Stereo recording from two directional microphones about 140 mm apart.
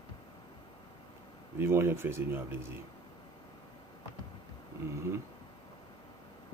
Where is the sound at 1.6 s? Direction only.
20° right (ahead or behind).